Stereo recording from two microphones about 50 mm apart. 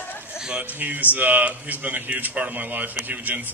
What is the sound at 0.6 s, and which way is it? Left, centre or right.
Speech, right.